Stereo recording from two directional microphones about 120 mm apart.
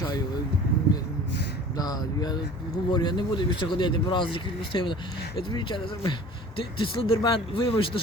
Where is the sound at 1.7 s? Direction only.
35° left (ahead or behind).